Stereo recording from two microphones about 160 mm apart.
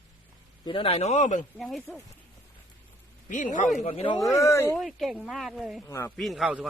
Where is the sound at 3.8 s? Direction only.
35° left (ahead or behind).